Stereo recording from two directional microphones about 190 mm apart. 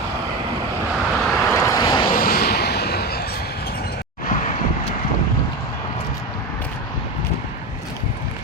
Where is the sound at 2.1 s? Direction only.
50° left (ahead or behind).